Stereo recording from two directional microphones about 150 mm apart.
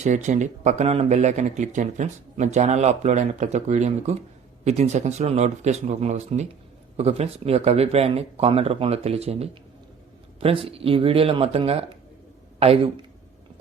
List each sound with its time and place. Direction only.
0.0 s speech: 50° right (ahead or behind)